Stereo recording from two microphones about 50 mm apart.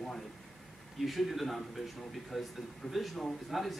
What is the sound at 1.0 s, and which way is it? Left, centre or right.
A man's voice, centre.